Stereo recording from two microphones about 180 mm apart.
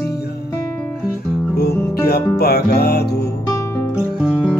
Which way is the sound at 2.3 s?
60° left (ahead or behind).